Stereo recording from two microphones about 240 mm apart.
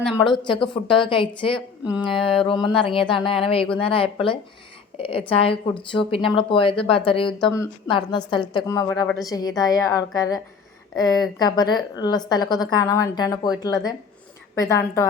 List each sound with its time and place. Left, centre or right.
0.3 s speech: centre
1.9 s a sound: centre
2.1 s a woman's voice: left
14.6 s a woman's voice: centre